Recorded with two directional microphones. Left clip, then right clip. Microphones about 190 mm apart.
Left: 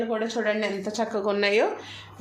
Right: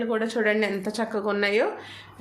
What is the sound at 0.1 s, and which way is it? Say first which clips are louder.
Speech: right 2 dB; 30° right (ahead or behind).